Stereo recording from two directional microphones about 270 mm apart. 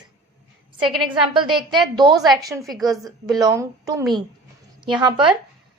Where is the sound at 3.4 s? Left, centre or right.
Centre.